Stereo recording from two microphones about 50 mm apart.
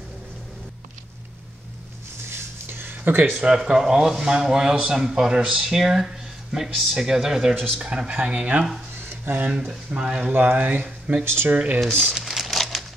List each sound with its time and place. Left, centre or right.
2.2 s a sound: right
3.1 s speech: right
3.3 s speech: centre
7.5 s speech: centre
7.8 s speech: centre
9.0 s a sound: right
9.7 s speech: centre
10.3 s speech: right
11.2 s speech: right
11.5 s speech: right
12.1 s crumpling: centre